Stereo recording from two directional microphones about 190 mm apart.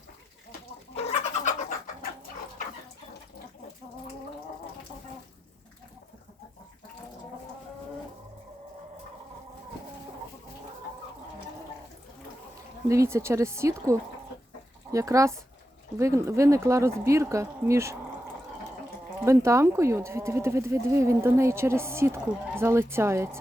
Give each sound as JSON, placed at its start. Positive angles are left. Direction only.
{"t": 0.9, "sound": "chicken", "side_deg": 35}
{"t": 12.9, "sound": "speech", "side_deg": -15}
{"t": 19.2, "sound": "speech", "side_deg": -15}